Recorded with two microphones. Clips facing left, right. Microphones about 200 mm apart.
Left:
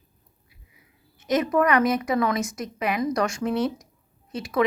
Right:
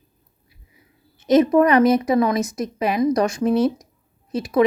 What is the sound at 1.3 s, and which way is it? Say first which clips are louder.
A woman's voice: right 7 dB; 25° right (ahead or behind).